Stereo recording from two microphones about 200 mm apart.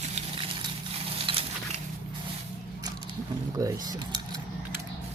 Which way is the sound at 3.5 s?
20° right (ahead or behind).